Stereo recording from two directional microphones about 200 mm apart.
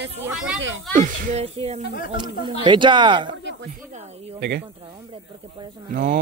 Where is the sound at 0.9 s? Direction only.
40° right (ahead or behind).